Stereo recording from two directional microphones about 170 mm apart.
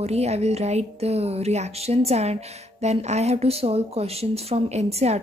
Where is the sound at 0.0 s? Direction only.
40° right (ahead or behind).